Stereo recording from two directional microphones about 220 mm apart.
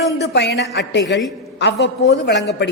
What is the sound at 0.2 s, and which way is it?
A woman's voice, 50° left (ahead or behind).